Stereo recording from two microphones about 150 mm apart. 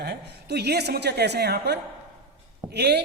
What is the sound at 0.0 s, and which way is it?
A man's voice, 90° right.